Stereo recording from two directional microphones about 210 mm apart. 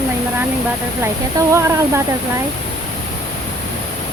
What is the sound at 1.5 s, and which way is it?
Speech, 15° right (ahead or behind).